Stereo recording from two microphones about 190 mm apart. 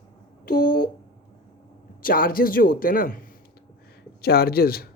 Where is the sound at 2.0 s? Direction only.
50° left (ahead or behind).